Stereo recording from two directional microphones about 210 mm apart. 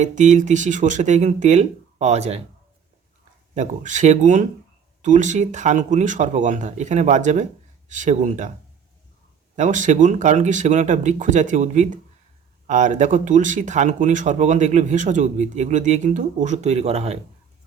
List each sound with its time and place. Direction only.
0.0 s speech: 35° right (ahead or behind)
3.5 s speech: 35° right (ahead or behind)
9.6 s speech: 35° right (ahead or behind)